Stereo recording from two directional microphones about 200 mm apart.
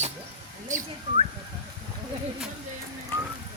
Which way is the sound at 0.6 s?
35° right (ahead or behind).